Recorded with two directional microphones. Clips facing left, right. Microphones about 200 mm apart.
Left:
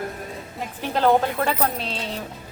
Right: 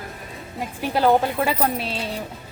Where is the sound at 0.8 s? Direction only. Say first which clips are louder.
Right 1 dB; 10° right (ahead or behind).